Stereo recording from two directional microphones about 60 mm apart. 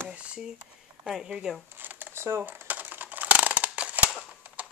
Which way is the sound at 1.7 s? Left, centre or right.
Right.